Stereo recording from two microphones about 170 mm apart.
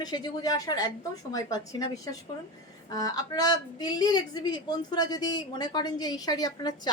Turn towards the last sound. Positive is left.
turn(degrees=25)  # may be behind; listen again after turning